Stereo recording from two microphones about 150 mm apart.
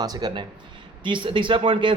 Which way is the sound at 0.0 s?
25° right (ahead or behind).